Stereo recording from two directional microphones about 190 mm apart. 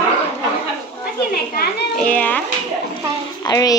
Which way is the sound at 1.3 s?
55° left (ahead or behind).